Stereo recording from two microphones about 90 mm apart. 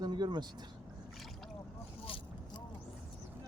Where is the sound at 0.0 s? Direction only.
55° right (ahead or behind).